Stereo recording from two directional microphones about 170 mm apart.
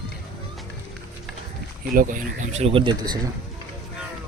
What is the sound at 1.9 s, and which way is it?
Speech, 55° right (ahead or behind).